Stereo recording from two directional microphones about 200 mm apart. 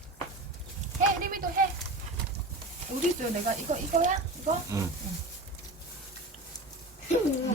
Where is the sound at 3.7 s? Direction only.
35° right (ahead or behind).